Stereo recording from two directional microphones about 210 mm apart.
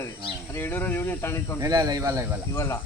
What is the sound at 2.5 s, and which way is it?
Speech, 15° left (ahead or behind).